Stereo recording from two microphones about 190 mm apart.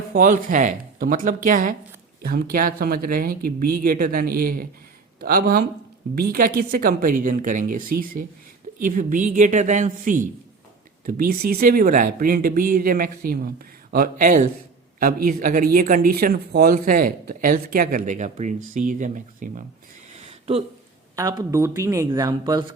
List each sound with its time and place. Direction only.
0.1 s speech: 45° right (ahead or behind)
20.1 s a sound: 30° right (ahead or behind)
21.2 s speech: 15° right (ahead or behind)